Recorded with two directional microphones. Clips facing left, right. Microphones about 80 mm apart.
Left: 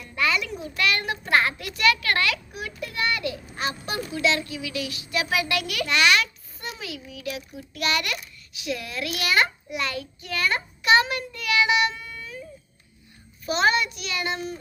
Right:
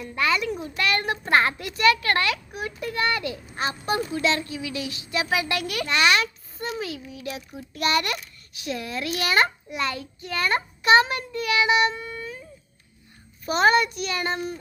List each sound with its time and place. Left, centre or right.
0.0 s a sound: right
0.8 s a child's voice: right
13.4 s a child's voice: right